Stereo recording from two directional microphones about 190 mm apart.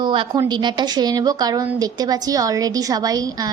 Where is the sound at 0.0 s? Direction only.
25° right (ahead or behind).